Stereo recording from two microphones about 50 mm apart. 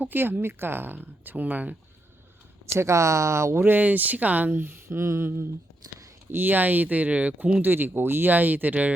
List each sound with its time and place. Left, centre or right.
0.0 s speech: right
2.7 s speech: right
3.6 s speech: right
6.3 s speech: right
7.6 s speech: right